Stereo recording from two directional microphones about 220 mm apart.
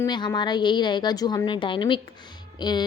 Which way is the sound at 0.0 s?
20° left (ahead or behind).